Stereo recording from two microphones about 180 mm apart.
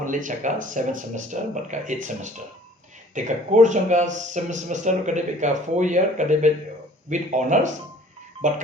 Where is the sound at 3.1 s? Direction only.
40° right (ahead or behind).